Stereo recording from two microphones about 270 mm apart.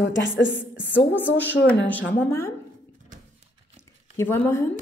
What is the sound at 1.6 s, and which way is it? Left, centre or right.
Speech, centre.